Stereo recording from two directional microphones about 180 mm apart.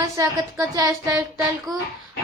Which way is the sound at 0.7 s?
20° right (ahead or behind).